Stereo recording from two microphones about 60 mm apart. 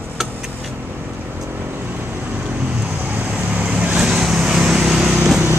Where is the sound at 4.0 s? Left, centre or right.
Centre.